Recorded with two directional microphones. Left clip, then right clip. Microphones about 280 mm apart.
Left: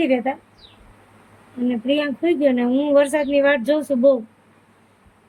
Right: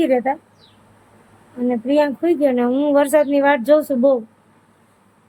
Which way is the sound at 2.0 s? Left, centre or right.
Centre.